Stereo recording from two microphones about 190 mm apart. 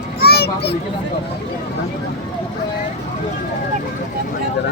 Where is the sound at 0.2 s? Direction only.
55° left (ahead or behind).